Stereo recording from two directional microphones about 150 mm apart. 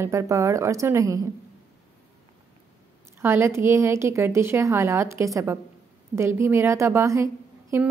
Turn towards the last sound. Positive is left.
turn(degrees=-20)  # may be behind; listen again after turning